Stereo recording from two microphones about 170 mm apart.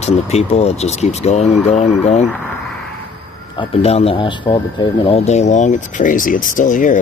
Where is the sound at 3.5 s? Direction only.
35° left (ahead or behind).